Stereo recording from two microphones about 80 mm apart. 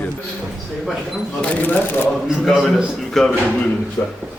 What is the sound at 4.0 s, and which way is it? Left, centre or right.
Speech, left.